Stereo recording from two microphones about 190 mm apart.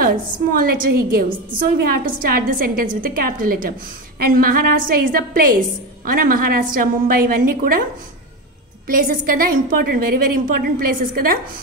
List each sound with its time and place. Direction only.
0.0 s a woman's voice: 50° right (ahead or behind)
8.8 s a woman's voice: 45° right (ahead or behind)